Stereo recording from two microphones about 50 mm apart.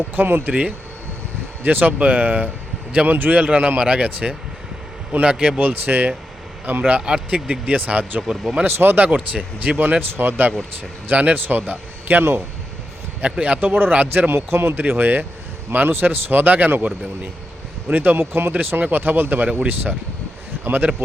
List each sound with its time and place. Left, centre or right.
0.2 s a man's voice: right
3.8 s speech: right
5.5 s a man's voice: right
7.0 s speech: centre
7.7 s a man's voice: right
8.6 s a man's voice: right
9.0 s a man's voice: right
11.1 s a man's voice: right
13.2 s a man's voice: right
18.5 s a man's voice: right